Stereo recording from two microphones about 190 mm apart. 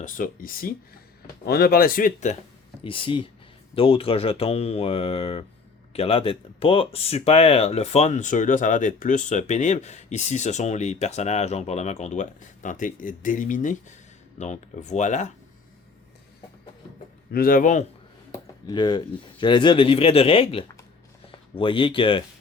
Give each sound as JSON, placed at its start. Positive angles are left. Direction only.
{"t": 0.0, "sound": "speech", "side_deg": 45}
{"t": 2.8, "sound": "speech", "side_deg": 25}
{"t": 17.3, "sound": "speech", "side_deg": 50}
{"t": 18.3, "sound": "speech", "side_deg": 20}